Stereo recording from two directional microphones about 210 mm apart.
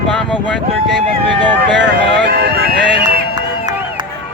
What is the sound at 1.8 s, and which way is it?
Speech, 50° right (ahead or behind).